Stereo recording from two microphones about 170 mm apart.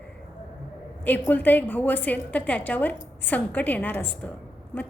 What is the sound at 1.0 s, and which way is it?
A woman's voice, 10° left (ahead or behind).